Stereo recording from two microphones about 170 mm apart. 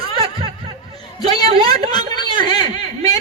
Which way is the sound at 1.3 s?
25° left (ahead or behind).